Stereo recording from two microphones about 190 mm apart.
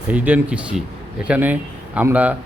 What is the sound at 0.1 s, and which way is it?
Speech, 10° right (ahead or behind).